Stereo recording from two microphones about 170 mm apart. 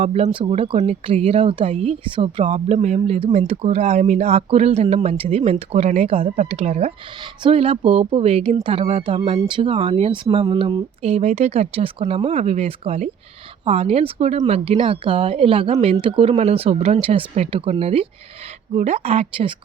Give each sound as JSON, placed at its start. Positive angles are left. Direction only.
{"t": 0.0, "sound": "a woman's voice", "side_deg": -40}